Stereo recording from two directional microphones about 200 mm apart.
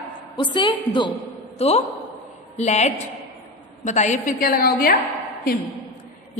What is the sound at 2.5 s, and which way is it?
A woman's voice, 35° left (ahead or behind).